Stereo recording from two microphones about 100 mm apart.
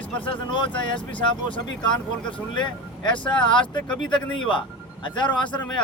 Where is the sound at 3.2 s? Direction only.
10° left (ahead or behind).